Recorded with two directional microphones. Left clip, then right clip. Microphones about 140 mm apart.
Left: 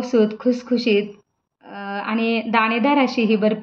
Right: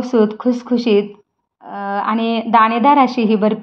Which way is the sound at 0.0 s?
35° right (ahead or behind).